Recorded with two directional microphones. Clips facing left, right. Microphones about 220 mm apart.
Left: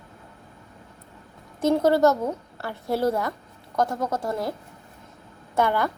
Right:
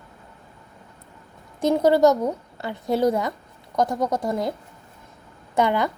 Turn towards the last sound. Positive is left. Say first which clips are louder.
# right 2 dB
turn(degrees=-20)  # may be behind; listen again after turning